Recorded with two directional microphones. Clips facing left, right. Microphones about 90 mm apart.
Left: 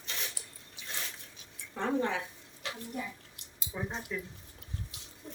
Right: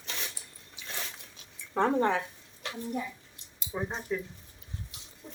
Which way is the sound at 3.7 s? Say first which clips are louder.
Right 4 dB; 30° right (ahead or behind).